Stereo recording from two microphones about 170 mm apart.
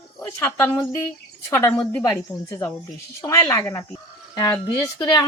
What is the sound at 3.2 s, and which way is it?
A woman's voice, 20° left (ahead or behind).